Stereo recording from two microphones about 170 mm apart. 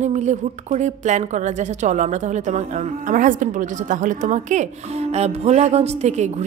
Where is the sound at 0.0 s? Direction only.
45° right (ahead or behind).